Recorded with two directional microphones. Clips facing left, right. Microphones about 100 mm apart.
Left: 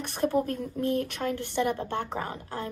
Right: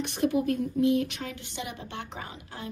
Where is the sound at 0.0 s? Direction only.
45° left (ahead or behind).